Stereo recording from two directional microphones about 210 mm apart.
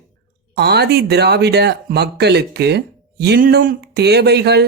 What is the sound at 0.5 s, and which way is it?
Speech, 50° right (ahead or behind).